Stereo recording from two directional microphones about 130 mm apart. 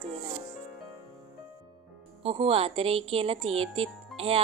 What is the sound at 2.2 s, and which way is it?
Speech, 45° right (ahead or behind).